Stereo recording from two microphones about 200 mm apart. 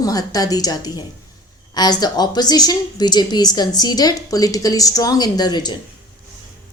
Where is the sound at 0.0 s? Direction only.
20° left (ahead or behind).